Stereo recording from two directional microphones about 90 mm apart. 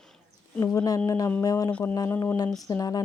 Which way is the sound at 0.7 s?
45° left (ahead or behind).